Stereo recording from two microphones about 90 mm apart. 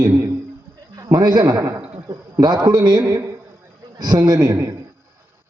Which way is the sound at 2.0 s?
55° right (ahead or behind).